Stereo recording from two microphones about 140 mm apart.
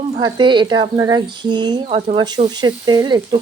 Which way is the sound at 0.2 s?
30° right (ahead or behind).